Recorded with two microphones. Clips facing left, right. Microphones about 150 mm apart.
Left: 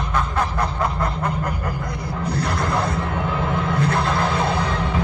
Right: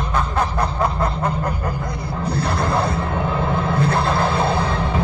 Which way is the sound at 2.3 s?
30° right (ahead or behind).